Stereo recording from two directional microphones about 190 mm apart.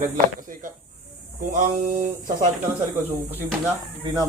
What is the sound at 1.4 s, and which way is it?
Speech, 40° right (ahead or behind).